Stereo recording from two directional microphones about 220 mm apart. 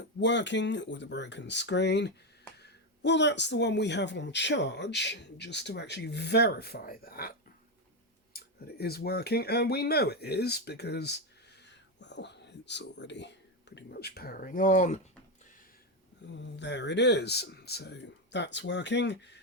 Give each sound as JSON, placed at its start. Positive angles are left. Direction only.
{"t": 0.2, "sound": "a man's voice", "side_deg": 55}
{"t": 16.4, "sound": "a man's voice", "side_deg": 50}